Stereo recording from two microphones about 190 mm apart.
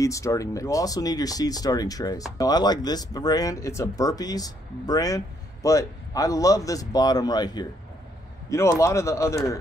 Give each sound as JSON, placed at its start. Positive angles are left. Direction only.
{"t": 0.0, "sound": "speech", "side_deg": 15}